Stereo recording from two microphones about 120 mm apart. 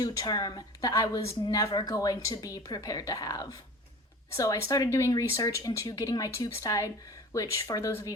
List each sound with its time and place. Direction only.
0.0 s speech: 30° left (ahead or behind)